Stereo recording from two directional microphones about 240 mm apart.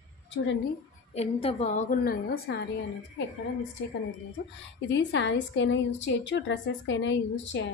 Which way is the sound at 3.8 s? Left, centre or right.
Left.